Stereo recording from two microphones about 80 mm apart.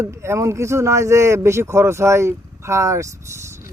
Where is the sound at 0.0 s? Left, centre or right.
Right.